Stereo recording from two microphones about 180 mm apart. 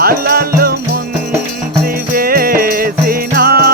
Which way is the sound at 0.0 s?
55° right (ahead or behind).